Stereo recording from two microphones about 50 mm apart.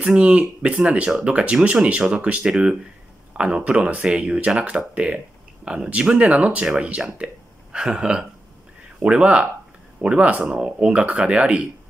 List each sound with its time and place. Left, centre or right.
0.0 s speech: right